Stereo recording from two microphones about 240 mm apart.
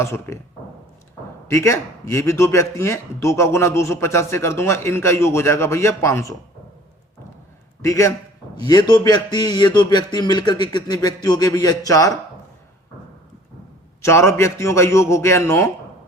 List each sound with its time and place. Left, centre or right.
0.0 s a man's voice: centre
1.5 s a man's voice: centre
7.8 s a man's voice: centre
14.0 s a man's voice: centre